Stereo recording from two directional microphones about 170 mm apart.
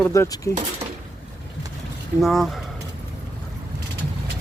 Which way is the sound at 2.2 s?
Centre (ahead or behind).